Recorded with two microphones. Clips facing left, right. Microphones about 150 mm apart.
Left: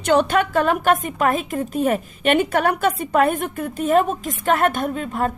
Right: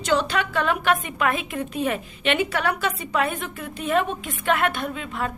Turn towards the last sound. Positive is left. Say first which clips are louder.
# left 6 dB
turn(degrees=45)  # may be behind; listen again after turning